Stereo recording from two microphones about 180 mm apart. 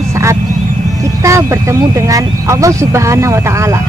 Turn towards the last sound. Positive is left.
turn(degrees=-15)  # may be behind; listen again after turning